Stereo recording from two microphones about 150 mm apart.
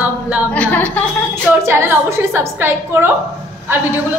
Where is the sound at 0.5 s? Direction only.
10° left (ahead or behind).